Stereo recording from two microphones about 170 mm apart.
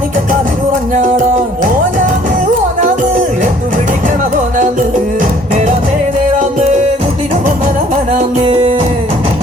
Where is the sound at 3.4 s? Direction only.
50° right (ahead or behind).